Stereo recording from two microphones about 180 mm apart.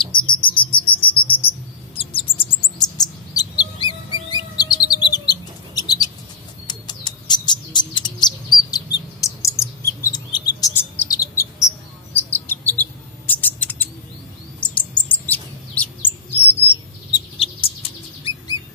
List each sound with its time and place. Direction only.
0.0 s insect: 25° left (ahead or behind)
2.0 s bird: 30° left (ahead or behind)
12.2 s chirp: 10° left (ahead or behind)
13.3 s a sound: 10° left (ahead or behind)
14.6 s chirp: 5° left (ahead or behind)
17.1 s bird: 30° left (ahead or behind)